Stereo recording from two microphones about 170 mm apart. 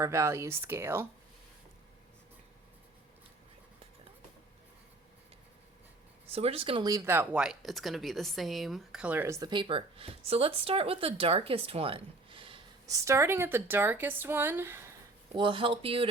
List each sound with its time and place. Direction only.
0.0 s speech: 15° right (ahead or behind)
6.3 s speech: 35° right (ahead or behind)
12.9 s speech: 15° right (ahead or behind)
15.3 s speech: 30° right (ahead or behind)